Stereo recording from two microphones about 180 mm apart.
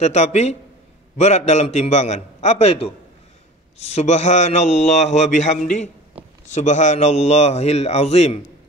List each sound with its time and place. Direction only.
0.0 s a man's voice: 40° left (ahead or behind)